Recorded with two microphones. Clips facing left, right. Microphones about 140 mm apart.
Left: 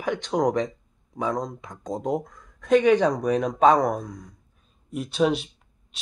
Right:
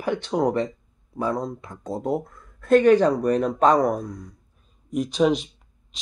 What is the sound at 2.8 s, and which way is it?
Speech, 10° right (ahead or behind).